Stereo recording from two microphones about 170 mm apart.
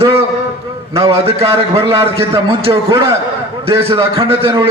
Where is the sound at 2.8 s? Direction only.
20° right (ahead or behind).